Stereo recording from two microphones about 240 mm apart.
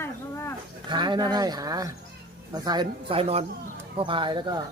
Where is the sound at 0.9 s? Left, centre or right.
Centre.